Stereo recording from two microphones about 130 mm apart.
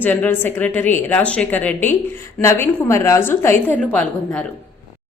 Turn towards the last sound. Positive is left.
turn(degrees=10)  # may be behind; listen again after turning